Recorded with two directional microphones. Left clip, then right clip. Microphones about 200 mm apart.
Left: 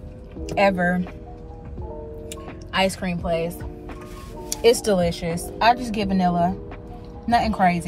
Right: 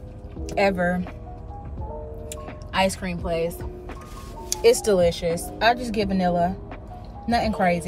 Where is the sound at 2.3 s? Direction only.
25° left (ahead or behind).